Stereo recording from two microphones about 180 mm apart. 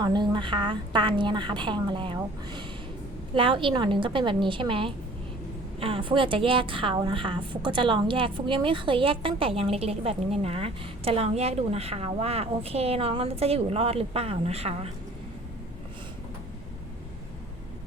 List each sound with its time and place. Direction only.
0.0 s a woman's voice: 25° right (ahead or behind)